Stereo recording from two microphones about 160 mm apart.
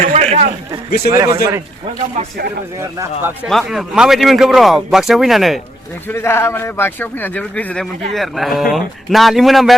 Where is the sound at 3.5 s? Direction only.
Centre (ahead or behind).